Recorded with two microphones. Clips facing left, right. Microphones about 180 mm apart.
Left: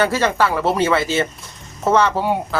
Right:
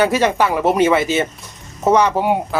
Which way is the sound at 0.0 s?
15° right (ahead or behind).